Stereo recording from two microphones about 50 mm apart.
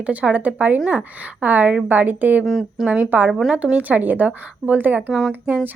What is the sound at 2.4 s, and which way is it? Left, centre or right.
Speech, centre.